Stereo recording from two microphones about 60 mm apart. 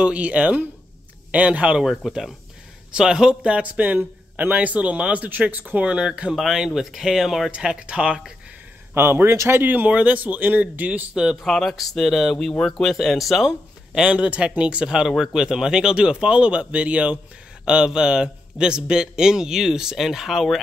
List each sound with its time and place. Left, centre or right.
0.0 s speech: right
1.8 s a man's voice: centre
6.3 s speech: centre
7.5 s a man's voice: centre
8.9 s a man's voice: right
11.4 s speech: centre
13.5 s a man's voice: centre